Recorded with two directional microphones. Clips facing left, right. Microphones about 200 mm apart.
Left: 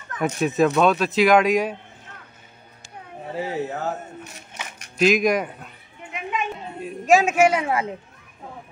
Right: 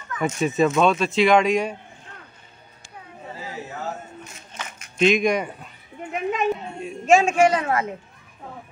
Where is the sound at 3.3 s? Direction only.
65° left (ahead or behind).